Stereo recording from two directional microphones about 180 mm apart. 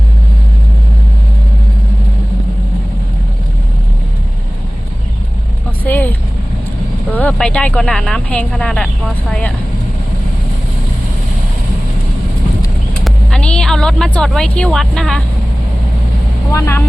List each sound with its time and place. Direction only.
5.8 s vehicle: 10° left (ahead or behind)
7.1 s speech: 10° left (ahead or behind)
13.1 s speech: 5° left (ahead or behind)
16.5 s speech: 15° left (ahead or behind)